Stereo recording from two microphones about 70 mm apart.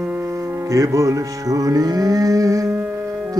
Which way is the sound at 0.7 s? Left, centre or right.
Right.